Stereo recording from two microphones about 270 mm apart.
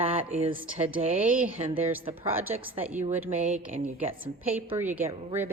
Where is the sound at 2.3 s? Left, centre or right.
Centre.